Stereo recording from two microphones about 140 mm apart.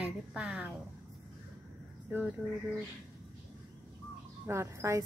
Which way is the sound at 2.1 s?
15° right (ahead or behind).